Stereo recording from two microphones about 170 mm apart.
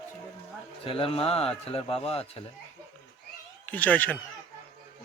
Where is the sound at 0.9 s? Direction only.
35° left (ahead or behind).